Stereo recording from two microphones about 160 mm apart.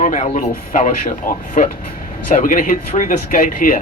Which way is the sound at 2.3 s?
55° left (ahead or behind).